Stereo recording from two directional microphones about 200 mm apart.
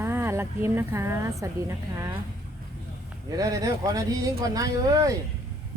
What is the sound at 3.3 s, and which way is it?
Speech, 20° right (ahead or behind).